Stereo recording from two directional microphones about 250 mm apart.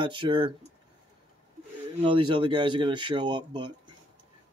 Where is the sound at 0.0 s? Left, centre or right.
Centre.